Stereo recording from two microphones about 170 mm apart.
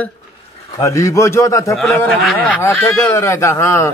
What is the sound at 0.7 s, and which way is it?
A man's voice, 20° left (ahead or behind).